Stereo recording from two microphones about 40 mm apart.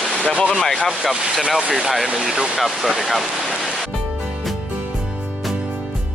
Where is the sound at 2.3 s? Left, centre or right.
Centre.